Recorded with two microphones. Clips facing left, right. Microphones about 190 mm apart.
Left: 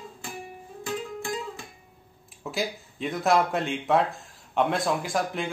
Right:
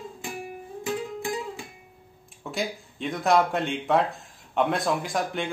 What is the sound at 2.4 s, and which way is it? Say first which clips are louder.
Speech: even; centre (ahead or behind).